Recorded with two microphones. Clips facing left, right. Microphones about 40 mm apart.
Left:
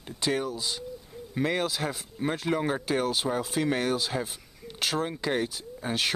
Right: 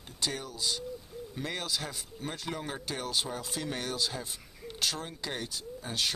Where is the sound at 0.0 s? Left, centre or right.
Left.